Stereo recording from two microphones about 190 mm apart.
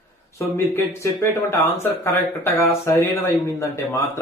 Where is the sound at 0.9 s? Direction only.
15° left (ahead or behind).